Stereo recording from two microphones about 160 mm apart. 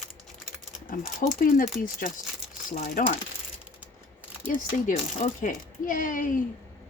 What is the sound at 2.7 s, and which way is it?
Speech, 55° left (ahead or behind).